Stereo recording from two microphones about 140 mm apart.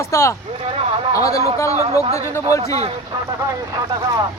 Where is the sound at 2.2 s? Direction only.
20° left (ahead or behind).